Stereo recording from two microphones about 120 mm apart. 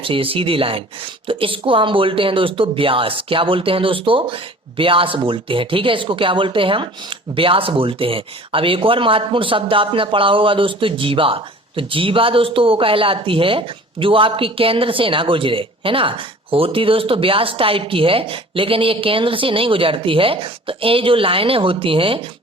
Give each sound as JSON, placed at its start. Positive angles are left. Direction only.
{"t": 0.0, "sound": "speech", "side_deg": -50}